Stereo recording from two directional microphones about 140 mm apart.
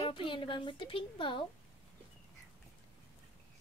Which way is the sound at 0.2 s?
40° left (ahead or behind).